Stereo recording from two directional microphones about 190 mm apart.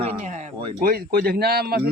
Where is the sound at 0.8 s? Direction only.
50° right (ahead or behind).